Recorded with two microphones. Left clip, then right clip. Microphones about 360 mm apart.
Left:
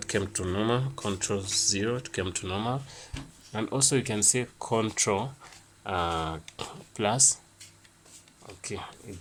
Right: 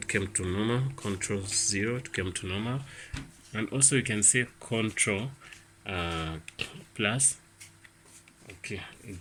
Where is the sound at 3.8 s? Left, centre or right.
Centre.